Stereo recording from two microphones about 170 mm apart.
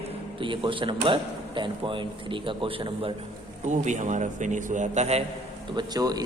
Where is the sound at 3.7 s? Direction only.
45° right (ahead or behind).